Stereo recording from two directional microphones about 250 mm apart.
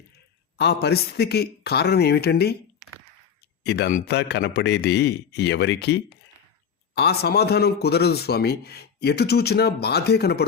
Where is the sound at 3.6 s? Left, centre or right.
Left.